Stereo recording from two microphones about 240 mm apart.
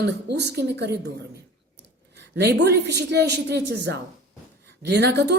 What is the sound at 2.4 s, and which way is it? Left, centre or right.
A woman's voice, right.